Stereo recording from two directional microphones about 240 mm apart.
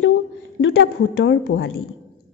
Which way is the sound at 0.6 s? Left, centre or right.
Left.